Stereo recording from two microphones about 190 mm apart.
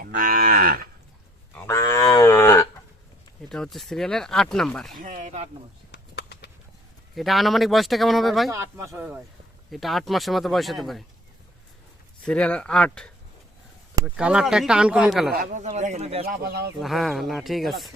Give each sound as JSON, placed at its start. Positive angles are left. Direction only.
{"t": 0.0, "sound": "moo", "side_deg": -50}
{"t": 1.5, "sound": "cattle", "side_deg": 15}
{"t": 3.5, "sound": "speech", "side_deg": 0}
{"t": 4.9, "sound": "a man's voice", "side_deg": -45}
{"t": 5.9, "sound": "a sound", "side_deg": 60}
{"t": 7.2, "sound": "speech", "side_deg": 0}
{"t": 8.4, "sound": "speech", "side_deg": -15}
{"t": 12.2, "sound": "speech", "side_deg": 5}
{"t": 15.4, "sound": "a man's voice", "side_deg": -40}
{"t": 16.2, "sound": "speech", "side_deg": -55}
{"t": 16.8, "sound": "speech", "side_deg": 0}